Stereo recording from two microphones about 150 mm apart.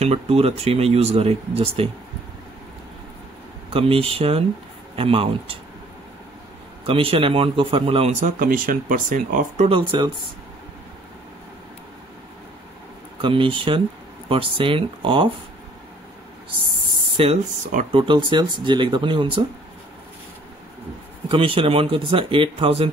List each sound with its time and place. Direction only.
0.0 s speech: 45° right (ahead or behind)
3.7 s speech: 40° right (ahead or behind)
6.9 s speech: 40° right (ahead or behind)
8.4 s speech: 65° right (ahead or behind)
9.7 s speech: 35° right (ahead or behind)
13.2 s speech: 35° right (ahead or behind)
17.2 s speech: 40° right (ahead or behind)
21.3 s speech: 35° right (ahead or behind)